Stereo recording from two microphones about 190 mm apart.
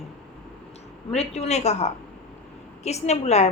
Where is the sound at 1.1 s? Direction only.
35° left (ahead or behind).